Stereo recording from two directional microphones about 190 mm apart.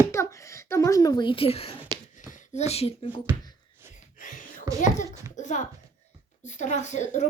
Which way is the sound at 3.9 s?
45° left (ahead or behind).